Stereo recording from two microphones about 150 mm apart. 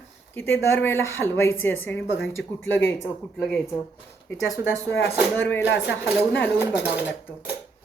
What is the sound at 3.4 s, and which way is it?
Speech, 5° left (ahead or behind).